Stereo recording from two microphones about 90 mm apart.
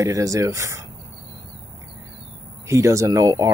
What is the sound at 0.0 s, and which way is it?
Speech, 35° right (ahead or behind).